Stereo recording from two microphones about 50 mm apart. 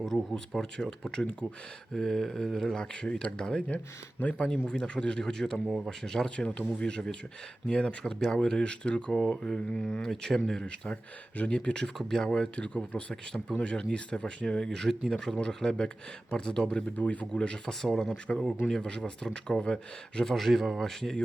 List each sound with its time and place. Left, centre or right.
0.0 s speech: centre
4.2 s speech: left; by 5.5 s centre
5.5 s speech: centre
6.0 s speech: centre
6.3 s speech: left
11.9 s speech: centre
17.0 s speech: left
17.7 s speech: centre
18.7 s speech: centre
20.2 s speech: centre
20.8 s speech: centre